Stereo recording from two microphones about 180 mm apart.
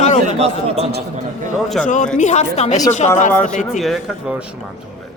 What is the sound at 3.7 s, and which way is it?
Speech, centre (ahead or behind).